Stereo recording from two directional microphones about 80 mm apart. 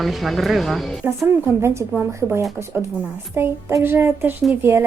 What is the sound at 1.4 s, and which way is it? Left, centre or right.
Speech, right.